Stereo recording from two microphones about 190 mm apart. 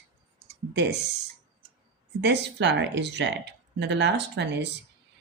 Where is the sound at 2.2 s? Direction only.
65° right (ahead or behind).